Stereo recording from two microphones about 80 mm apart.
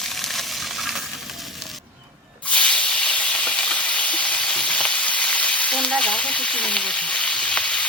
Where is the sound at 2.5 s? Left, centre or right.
Centre.